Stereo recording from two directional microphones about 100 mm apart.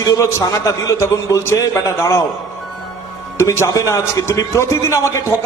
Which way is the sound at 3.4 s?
30° left (ahead or behind).